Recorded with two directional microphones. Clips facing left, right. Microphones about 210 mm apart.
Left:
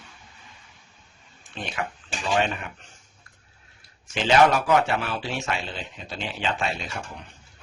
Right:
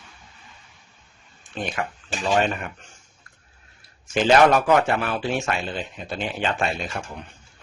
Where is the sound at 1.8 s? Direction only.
45° right (ahead or behind).